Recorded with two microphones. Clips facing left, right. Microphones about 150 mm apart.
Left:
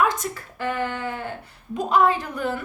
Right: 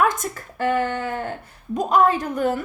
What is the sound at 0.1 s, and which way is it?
A woman's voice, 45° right (ahead or behind).